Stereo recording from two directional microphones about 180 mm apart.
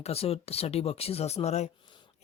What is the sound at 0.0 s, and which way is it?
Speech, 35° left (ahead or behind).